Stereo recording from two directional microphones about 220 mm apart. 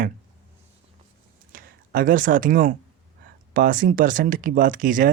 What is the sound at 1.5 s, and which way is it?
Speech, 40° right (ahead or behind).